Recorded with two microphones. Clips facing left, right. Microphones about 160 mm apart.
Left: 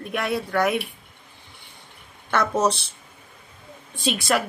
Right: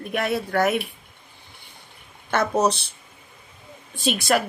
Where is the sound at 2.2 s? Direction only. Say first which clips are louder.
Right 1 dB; 20° right (ahead or behind).